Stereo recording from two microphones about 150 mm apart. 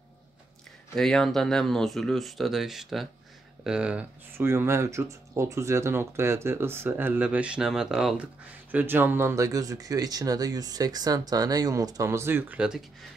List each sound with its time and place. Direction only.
0.9 s speech: centre (ahead or behind)